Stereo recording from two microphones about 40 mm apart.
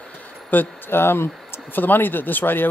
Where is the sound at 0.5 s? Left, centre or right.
Left.